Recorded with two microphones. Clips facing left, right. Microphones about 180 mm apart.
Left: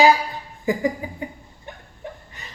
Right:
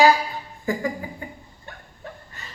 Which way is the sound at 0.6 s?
20° left (ahead or behind).